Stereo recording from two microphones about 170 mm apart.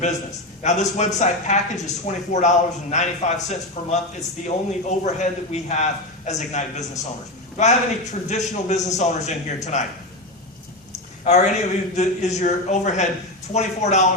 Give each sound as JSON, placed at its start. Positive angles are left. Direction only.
{"t": 0.6, "sound": "speech", "side_deg": 45}
{"t": 11.2, "sound": "speech", "side_deg": 40}